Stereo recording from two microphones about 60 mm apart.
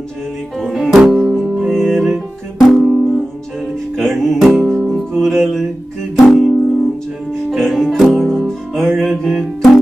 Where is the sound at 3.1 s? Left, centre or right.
Centre.